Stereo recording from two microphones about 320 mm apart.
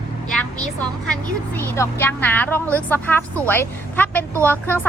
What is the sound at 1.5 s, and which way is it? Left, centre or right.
A woman's voice, centre.